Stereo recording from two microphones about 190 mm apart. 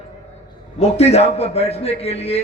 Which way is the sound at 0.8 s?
35° left (ahead or behind).